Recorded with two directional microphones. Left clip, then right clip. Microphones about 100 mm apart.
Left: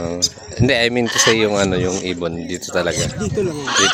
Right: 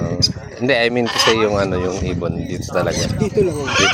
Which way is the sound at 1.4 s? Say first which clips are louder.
Even; 80° left.